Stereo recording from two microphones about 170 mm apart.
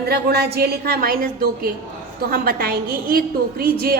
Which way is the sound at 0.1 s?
70° right (ahead or behind).